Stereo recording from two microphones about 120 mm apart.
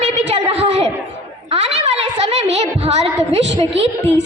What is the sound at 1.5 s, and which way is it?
Music, 60° right (ahead or behind).